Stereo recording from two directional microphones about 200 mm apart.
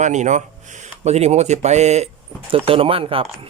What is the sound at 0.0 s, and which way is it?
A man's voice, 35° right (ahead or behind).